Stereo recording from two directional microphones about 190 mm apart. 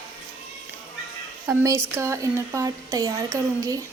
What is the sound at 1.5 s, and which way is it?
A woman's voice, 10° right (ahead or behind).